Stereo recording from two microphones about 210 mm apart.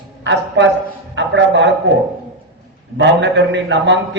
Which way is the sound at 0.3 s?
55° right (ahead or behind).